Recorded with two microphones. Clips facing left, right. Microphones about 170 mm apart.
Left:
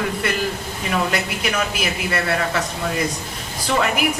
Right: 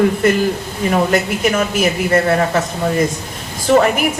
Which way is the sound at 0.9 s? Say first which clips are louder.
Right 7 dB; 45° right (ahead or behind).